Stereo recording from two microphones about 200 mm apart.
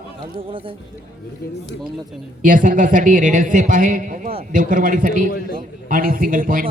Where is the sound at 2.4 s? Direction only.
40° right (ahead or behind).